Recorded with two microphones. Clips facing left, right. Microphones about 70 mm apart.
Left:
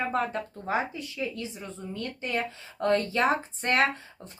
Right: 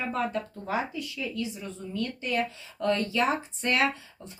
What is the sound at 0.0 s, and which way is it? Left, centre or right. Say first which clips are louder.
Speech: left 1 dB; left.